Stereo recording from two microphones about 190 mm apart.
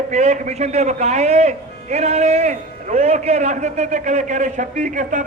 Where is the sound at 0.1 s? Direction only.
35° right (ahead or behind).